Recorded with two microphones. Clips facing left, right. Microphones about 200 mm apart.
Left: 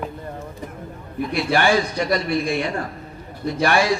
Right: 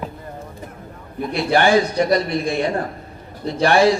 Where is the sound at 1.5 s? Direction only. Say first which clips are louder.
Right 4 dB; 35° right (ahead or behind).